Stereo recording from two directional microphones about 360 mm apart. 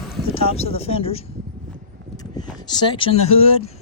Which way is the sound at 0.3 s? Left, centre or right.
Centre.